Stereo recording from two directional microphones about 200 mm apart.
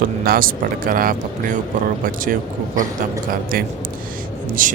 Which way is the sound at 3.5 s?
45° right (ahead or behind).